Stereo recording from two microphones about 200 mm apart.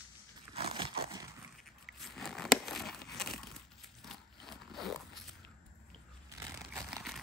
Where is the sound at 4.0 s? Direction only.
Centre (ahead or behind).